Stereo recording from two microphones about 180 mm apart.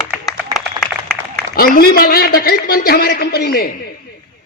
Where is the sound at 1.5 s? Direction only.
55° left (ahead or behind).